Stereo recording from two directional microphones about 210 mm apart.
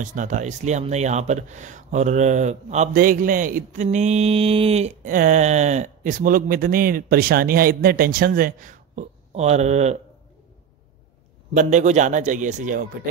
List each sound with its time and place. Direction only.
0.0 s speech: 35° right (ahead or behind)
11.5 s speech: 35° right (ahead or behind)